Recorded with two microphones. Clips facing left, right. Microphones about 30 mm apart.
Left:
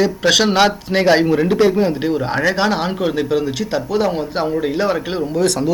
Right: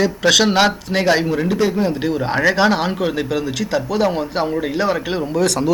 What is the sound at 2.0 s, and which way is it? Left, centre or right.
A man's voice, centre.